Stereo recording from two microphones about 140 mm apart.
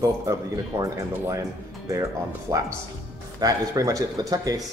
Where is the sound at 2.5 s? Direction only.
25° right (ahead or behind).